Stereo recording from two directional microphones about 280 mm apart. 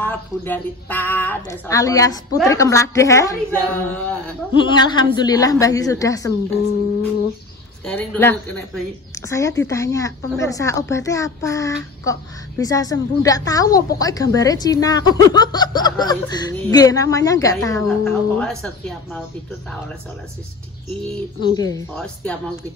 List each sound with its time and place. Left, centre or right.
0.0 s a woman's voice: centre
4.6 s a woman's voice: centre
7.8 s a woman's voice: centre
21.5 s a woman's voice: centre